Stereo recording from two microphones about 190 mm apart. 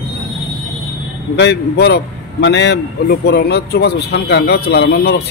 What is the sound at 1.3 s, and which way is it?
A man's voice, 60° left (ahead or behind).